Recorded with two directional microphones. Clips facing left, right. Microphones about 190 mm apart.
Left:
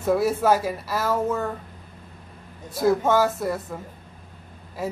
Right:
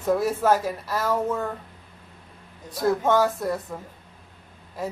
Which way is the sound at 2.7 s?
5° left (ahead or behind).